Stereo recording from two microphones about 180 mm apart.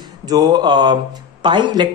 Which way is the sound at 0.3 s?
20° right (ahead or behind).